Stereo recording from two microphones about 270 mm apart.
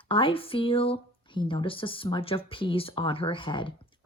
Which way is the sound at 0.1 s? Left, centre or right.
Centre.